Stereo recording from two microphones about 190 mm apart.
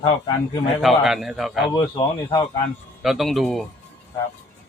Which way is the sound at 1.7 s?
20° left (ahead or behind).